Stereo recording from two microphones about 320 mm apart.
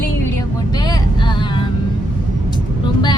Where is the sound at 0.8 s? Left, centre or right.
Centre.